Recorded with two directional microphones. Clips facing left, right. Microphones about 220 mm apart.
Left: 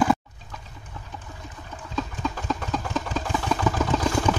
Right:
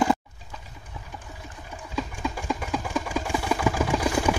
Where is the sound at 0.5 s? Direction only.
15° right (ahead or behind).